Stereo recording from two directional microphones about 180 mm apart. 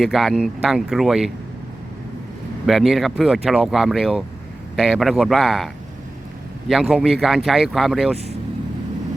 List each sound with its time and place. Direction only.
0.0 s speech: centre (ahead or behind)
2.6 s speech: centre (ahead or behind)